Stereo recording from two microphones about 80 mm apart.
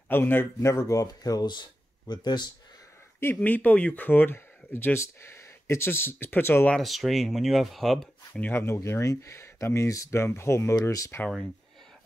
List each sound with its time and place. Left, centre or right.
0.1 s speech: left
0.6 s speech: left
3.3 s speech: centre
6.8 s speech: centre
8.3 s speech: left
8.7 s speech: left
10.8 s speech: left